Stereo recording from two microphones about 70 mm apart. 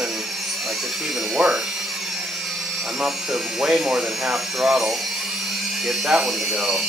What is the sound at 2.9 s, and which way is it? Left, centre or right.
Speech, centre.